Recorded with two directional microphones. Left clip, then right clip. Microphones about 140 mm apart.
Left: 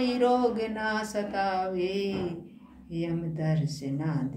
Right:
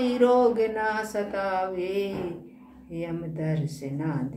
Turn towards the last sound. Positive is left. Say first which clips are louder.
# right 2 dB
turn(degrees=-25)  # may be behind; listen again after turning